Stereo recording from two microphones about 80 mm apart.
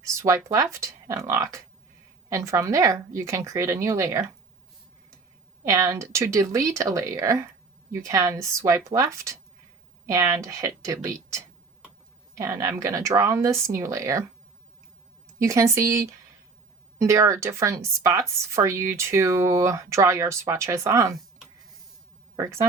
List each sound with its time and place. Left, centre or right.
0.0 s a woman's voice: right
5.6 s a woman's voice: right
15.4 s a woman's voice: right
22.4 s speech: right